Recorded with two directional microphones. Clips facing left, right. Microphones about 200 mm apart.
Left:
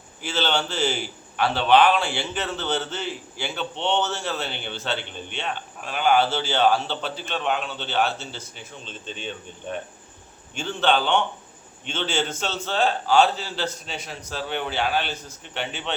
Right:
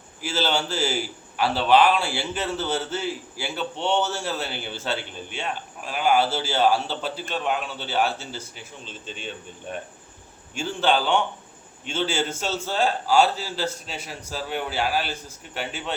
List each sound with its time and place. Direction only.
0.2 s a man's voice: 5° right (ahead or behind)